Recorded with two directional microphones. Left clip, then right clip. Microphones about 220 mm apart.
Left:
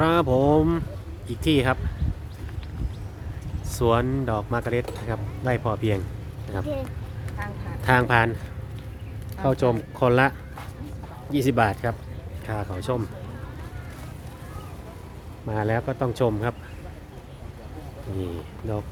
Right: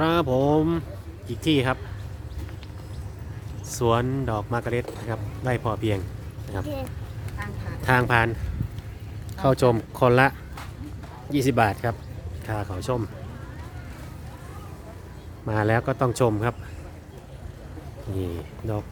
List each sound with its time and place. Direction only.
0.0 s speech: centre (ahead or behind)
3.7 s speech: centre (ahead or behind)
7.8 s speech: centre (ahead or behind)
9.4 s speech: 20° right (ahead or behind)
15.4 s a man's voice: 20° right (ahead or behind)
18.2 s speech: 15° right (ahead or behind)